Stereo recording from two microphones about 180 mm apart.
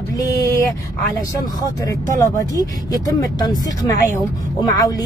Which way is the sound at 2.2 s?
20° left (ahead or behind).